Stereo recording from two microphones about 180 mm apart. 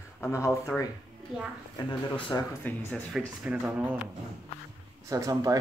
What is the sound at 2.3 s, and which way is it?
Speech, 20° left (ahead or behind).